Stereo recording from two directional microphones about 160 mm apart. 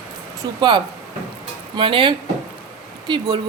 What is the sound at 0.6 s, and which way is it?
Speech, 30° right (ahead or behind).